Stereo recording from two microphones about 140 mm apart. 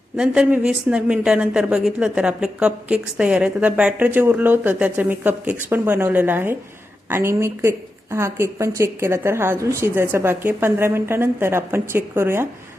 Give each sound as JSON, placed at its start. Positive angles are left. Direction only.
{"t": 0.2, "sound": "a woman's voice", "side_deg": -5}